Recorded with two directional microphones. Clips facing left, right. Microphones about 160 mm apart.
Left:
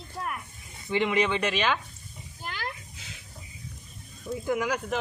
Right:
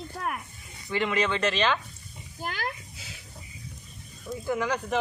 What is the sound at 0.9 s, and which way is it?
Speech, 15° left (ahead or behind).